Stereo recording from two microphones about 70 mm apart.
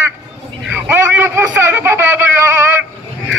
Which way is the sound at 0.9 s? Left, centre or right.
Right.